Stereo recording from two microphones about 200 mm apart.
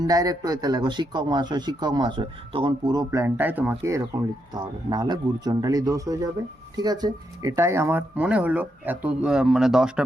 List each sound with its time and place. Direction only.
0.0 s a man's voice: 20° right (ahead or behind); by 10.0 s 5° right (ahead or behind)